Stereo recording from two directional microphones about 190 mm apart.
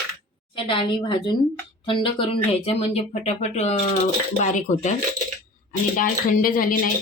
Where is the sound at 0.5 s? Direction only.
25° left (ahead or behind).